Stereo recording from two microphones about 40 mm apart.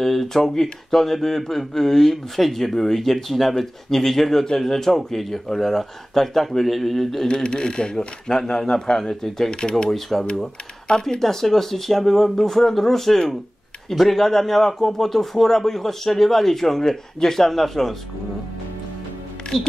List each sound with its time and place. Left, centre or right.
0.0 s speech: centre
7.2 s speech: left
9.5 s speech: left
9.8 s speech: centre
10.9 s speech: centre
19.5 s speech: centre